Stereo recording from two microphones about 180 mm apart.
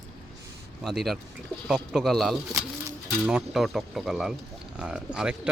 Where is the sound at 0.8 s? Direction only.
Centre (ahead or behind).